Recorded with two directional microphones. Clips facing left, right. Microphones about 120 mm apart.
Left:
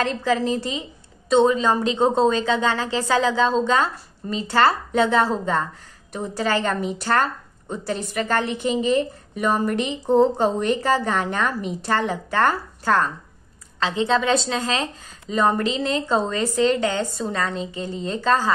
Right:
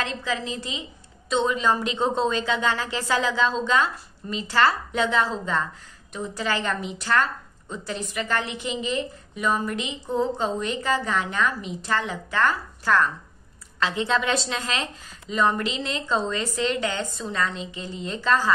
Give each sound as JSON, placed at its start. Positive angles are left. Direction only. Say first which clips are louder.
{"t": 0.0, "sound": "a woman's voice", "louder": "left 7 dB", "side_deg": 45}
{"t": 10.0, "sound": "a woman's voice", "louder": "left 8 dB", "side_deg": 70}
{"t": 10.4, "sound": "a woman's voice", "louder": "left 6 dB", "side_deg": 45}
{"t": 12.8, "sound": "a woman's voice", "louder": "left 1 dB", "side_deg": 30}